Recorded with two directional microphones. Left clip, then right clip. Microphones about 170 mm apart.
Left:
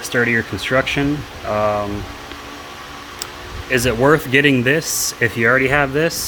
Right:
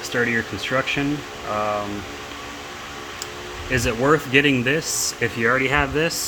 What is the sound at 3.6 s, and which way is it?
Speech, 35° left (ahead or behind).